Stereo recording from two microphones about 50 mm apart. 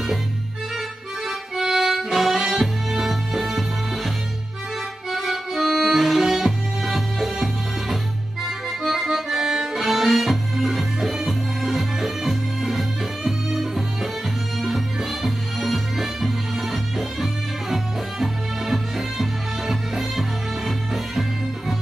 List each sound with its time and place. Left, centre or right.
1.6 s music: centre
5.1 s music: centre
8.5 s accordion: centre
15.2 s music: centre